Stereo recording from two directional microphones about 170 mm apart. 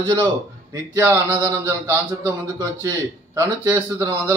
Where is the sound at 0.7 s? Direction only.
20° right (ahead or behind).